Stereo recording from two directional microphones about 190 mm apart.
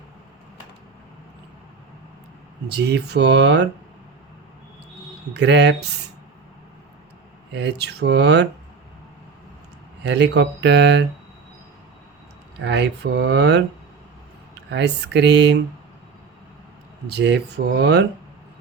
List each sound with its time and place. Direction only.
2.6 s speech: 60° right (ahead or behind)
5.3 s speech: 65° right (ahead or behind)
7.5 s speech: 65° right (ahead or behind)
10.0 s speech: 65° right (ahead or behind)
12.6 s speech: 65° right (ahead or behind)
14.7 s speech: 65° right (ahead or behind)
17.1 s speech: 65° right (ahead or behind)